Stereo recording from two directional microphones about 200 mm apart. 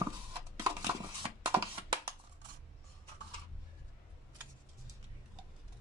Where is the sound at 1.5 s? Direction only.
10° right (ahead or behind).